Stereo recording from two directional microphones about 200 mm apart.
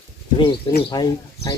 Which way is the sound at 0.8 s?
20° left (ahead or behind).